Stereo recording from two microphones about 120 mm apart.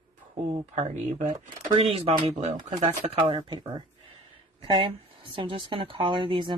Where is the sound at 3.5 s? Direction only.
40° right (ahead or behind).